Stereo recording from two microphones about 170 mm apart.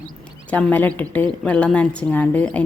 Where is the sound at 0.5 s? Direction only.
10° left (ahead or behind).